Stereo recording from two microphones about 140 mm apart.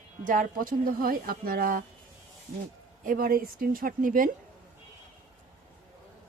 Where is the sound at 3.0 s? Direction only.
90° right.